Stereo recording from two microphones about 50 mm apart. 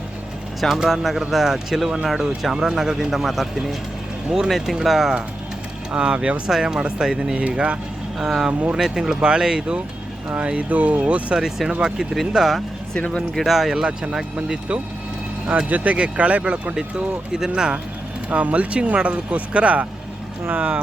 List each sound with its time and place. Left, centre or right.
0.9 s speech: centre
5.9 s speech: right
8.2 s speech: centre; by 11.3 s right
11.3 s speech: centre
12.3 s speech: centre
15.4 s speech: right
16.7 s speech: centre; by 20.8 s right